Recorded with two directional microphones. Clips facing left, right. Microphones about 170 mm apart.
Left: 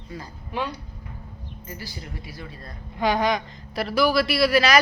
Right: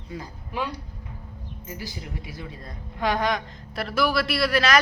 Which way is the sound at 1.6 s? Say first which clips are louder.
Right 2 dB; 15° right (ahead or behind).